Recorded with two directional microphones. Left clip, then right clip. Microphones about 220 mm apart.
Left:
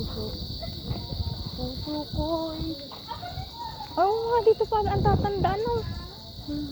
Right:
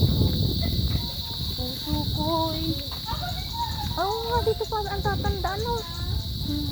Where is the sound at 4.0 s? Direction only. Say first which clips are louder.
Left 4 dB; 40° left (ahead or behind).